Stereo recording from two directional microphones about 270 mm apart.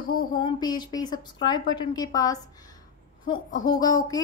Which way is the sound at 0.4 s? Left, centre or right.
Centre.